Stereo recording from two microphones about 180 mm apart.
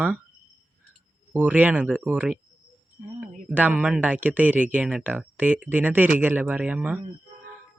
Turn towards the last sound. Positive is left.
turn(degrees=-5)  # may be behind; listen again after turning